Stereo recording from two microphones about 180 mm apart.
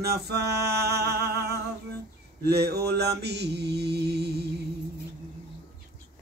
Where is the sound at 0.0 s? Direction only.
65° right (ahead or behind).